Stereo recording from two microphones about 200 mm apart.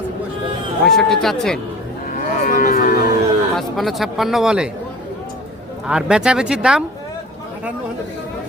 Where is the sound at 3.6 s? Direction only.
Centre (ahead or behind).